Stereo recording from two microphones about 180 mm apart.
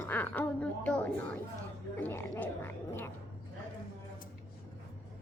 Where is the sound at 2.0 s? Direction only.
10° left (ahead or behind).